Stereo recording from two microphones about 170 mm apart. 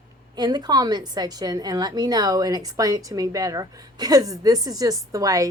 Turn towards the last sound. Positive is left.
turn(degrees=-20)  # may be behind; listen again after turning